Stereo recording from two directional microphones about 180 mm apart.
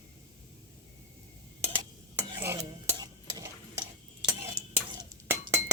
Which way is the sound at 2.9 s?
20° right (ahead or behind).